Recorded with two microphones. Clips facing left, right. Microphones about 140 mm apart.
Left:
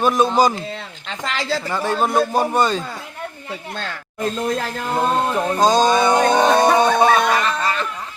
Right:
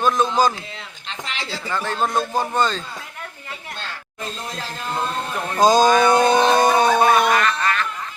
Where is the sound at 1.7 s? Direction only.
10° left (ahead or behind).